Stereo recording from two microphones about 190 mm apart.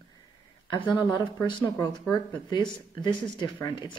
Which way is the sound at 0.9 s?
25° left (ahead or behind).